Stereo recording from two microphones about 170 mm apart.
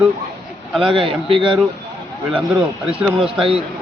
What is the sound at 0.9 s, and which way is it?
Speech, 30° right (ahead or behind).